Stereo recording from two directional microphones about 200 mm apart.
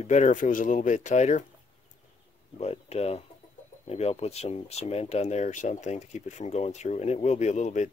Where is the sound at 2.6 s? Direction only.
30° left (ahead or behind).